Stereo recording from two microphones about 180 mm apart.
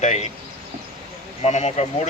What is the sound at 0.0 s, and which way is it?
Speech, 40° left (ahead or behind).